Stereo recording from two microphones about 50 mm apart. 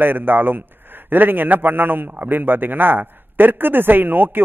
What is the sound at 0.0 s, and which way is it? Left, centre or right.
A man's voice, right.